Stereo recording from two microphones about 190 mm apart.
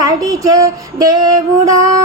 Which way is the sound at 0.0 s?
20° right (ahead or behind).